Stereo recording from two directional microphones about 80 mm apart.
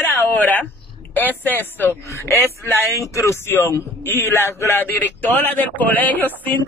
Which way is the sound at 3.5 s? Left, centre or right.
Left.